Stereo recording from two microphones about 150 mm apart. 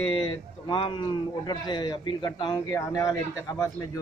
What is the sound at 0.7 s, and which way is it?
A man's voice, 35° left (ahead or behind).